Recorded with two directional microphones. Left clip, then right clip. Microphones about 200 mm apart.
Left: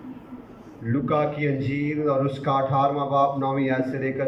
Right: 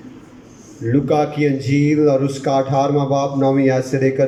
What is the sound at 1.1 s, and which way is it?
A man's voice, 30° right (ahead or behind).